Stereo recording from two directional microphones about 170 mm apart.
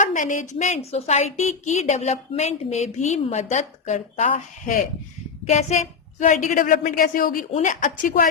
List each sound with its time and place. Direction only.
0.0 s a woman's voice: 45° left (ahead or behind)
5.5 s a woman's voice: 40° left (ahead or behind)